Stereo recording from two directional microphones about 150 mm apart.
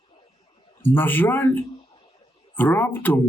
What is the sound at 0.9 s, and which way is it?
Speech, 15° left (ahead or behind).